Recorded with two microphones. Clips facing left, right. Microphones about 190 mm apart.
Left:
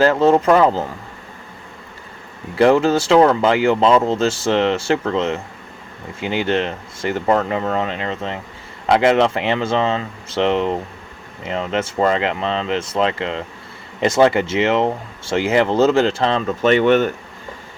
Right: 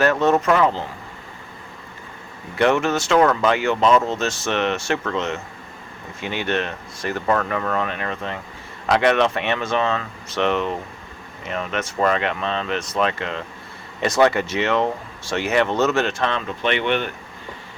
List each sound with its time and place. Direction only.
0.0 s speech: 30° left (ahead or behind)
2.6 s speech: 30° left (ahead or behind)
16.6 s speech: 40° left (ahead or behind)